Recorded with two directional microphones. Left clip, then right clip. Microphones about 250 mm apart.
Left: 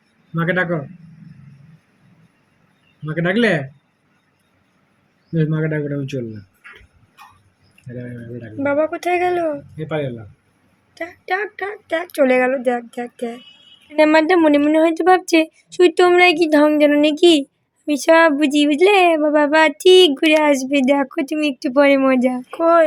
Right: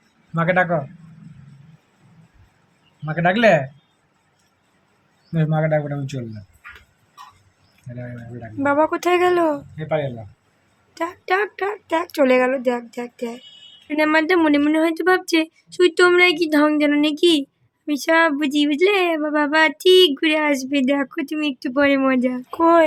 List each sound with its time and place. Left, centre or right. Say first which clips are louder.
0.5 s speech: right 2 dB; right
3.1 s speech: right 2 dB; right
5.5 s speech: right 7 dB; right
8.4 s speech: even; centre
13.9 s speech: left 4 dB; centre
22.4 s speech: left 1 dB; centre